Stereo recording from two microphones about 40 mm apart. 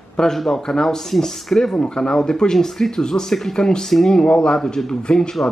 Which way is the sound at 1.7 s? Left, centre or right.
Left.